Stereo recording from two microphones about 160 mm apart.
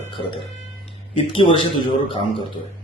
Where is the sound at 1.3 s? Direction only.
35° left (ahead or behind).